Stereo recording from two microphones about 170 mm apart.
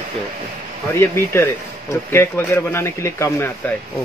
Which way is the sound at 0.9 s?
15° left (ahead or behind).